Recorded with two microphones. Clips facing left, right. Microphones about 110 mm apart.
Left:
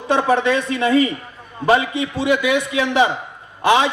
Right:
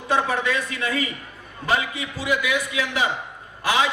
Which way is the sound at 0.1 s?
25° left (ahead or behind).